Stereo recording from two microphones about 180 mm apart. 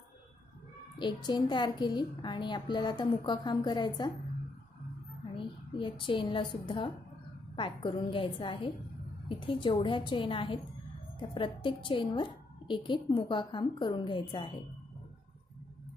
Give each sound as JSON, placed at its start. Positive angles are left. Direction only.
{"t": 0.9, "sound": "a woman's voice", "side_deg": 25}
{"t": 5.3, "sound": "a woman's voice", "side_deg": 25}